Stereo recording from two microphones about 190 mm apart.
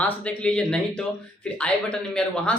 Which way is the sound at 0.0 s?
5° left (ahead or behind).